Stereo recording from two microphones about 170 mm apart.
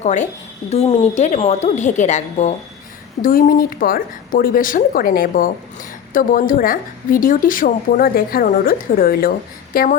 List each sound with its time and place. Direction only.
0.0 s a woman's voice: 45° left (ahead or behind)
3.2 s a woman's voice: 55° left (ahead or behind)